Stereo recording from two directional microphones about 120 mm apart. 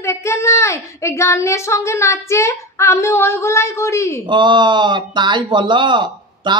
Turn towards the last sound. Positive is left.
turn(degrees=-40)  # may be behind; listen again after turning